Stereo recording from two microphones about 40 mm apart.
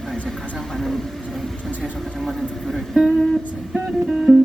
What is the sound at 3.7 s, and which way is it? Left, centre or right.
Music, centre.